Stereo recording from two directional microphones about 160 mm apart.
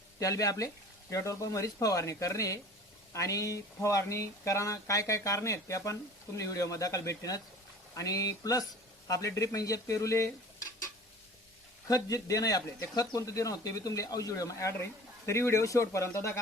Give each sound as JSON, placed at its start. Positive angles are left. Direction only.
{"t": 0.2, "sound": "speech", "side_deg": 20}
{"t": 11.9, "sound": "speech", "side_deg": 20}